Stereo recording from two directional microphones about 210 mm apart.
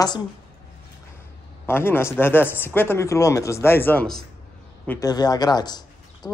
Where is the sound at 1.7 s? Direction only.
10° left (ahead or behind).